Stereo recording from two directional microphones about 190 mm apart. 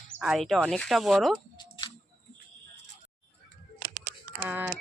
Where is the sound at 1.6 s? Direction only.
25° left (ahead or behind).